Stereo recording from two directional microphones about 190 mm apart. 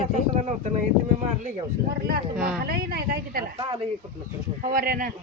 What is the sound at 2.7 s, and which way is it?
Speech, 55° right (ahead or behind).